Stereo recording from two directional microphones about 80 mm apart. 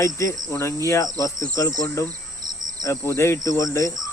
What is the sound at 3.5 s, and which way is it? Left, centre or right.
Speech, left.